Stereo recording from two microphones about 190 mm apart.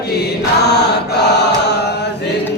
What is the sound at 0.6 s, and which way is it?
Chant, 60° left (ahead or behind).